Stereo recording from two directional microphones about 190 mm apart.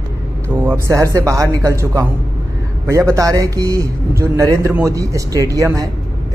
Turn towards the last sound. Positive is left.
turn(degrees=-15)  # may be behind; listen again after turning